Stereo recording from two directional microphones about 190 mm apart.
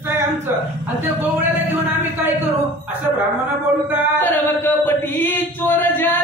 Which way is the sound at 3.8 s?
10° right (ahead or behind).